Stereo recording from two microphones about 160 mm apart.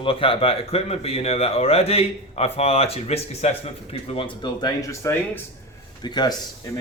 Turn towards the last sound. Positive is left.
turn(degrees=25)  # may be behind; listen again after turning